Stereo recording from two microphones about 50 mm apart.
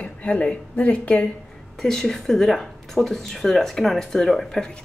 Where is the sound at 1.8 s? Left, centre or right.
Centre.